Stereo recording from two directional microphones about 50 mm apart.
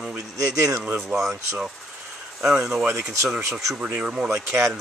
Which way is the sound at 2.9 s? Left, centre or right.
Right.